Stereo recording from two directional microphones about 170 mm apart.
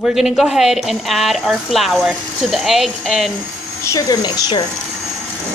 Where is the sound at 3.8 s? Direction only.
20° left (ahead or behind).